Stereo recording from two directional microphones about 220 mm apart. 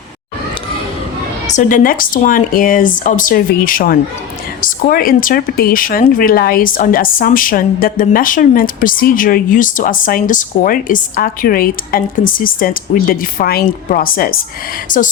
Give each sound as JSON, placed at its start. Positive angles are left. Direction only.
{"t": 1.5, "sound": "speech", "side_deg": 35}